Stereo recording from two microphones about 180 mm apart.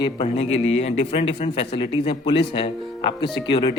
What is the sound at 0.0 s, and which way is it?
A man's voice, 30° left (ahead or behind).